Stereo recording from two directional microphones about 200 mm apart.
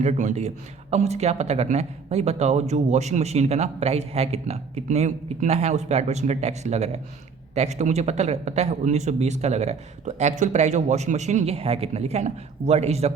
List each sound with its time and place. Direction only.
0.0 s speech: 35° right (ahead or behind)